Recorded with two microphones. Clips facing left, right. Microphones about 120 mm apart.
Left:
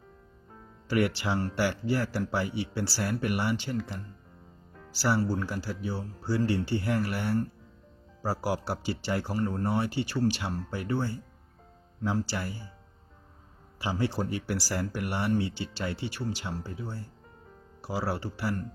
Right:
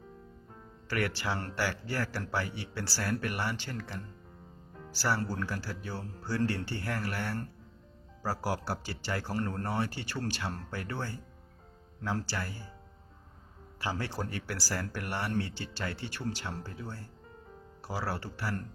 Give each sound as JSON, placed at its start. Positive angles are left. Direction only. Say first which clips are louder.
{"t": 0.9, "sound": "speech", "louder": "left 5 dB", "side_deg": 15}
{"t": 1.4, "sound": "speech", "louder": "left 5 dB", "side_deg": 5}
{"t": 13.7, "sound": "speech", "louder": "left 5 dB", "side_deg": 15}